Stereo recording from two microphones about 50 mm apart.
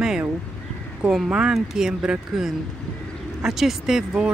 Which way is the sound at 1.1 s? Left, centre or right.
Centre.